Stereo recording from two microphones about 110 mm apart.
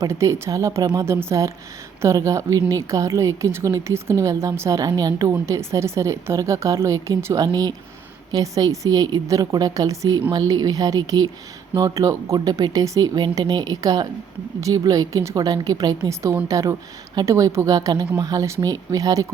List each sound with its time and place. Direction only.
0.0 s a woman's voice: 25° right (ahead or behind)